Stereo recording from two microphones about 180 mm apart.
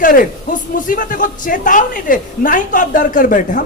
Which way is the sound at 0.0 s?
50° left (ahead or behind).